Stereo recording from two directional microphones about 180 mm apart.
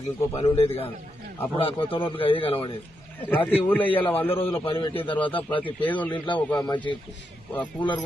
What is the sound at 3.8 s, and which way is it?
A man's voice, 30° left (ahead or behind).